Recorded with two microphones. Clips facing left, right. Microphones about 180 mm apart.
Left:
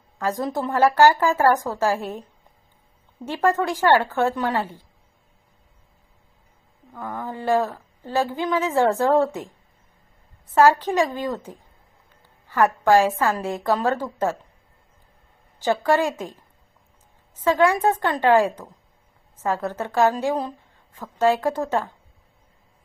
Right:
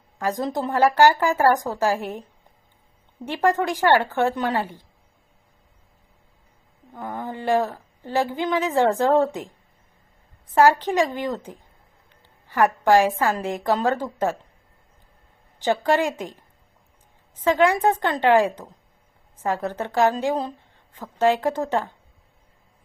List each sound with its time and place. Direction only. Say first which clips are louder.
0.3 s a woman's voice: even; 15° right (ahead or behind)
3.3 s a woman's voice: even; 15° right (ahead or behind)
6.9 s speech: even; 25° right (ahead or behind)
10.5 s speech: even; 15° right (ahead or behind)
12.5 s a woman's voice: even; 15° right (ahead or behind)
15.6 s a woman's voice: even; 20° right (ahead or behind)
17.4 s a woman's voice: even; 20° right (ahead or behind)